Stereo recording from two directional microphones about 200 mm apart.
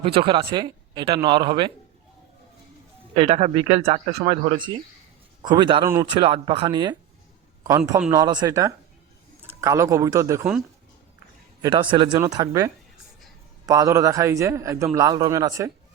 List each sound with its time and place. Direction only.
0.0 s speech: 25° right (ahead or behind)
3.2 s speech: 30° right (ahead or behind)
8.1 s a man's voice: 20° right (ahead or behind)
11.6 s a man's voice: 25° right (ahead or behind)